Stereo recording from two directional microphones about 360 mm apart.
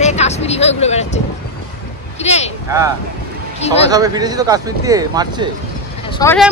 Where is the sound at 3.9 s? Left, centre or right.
Centre.